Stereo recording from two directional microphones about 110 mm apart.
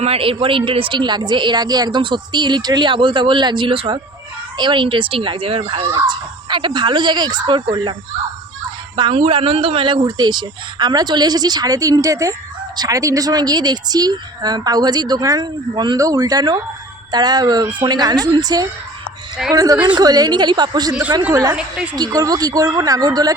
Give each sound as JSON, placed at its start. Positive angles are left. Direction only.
{"t": 0.0, "sound": "a woman's voice", "side_deg": -60}
{"t": 9.0, "sound": "speech", "side_deg": -50}
{"t": 16.0, "sound": "speech", "side_deg": -30}
{"t": 21.9, "sound": "speech", "side_deg": -35}